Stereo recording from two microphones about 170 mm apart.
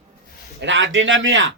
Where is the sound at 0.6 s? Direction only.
90° right.